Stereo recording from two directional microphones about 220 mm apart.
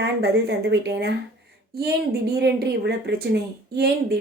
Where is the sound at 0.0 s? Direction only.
50° right (ahead or behind).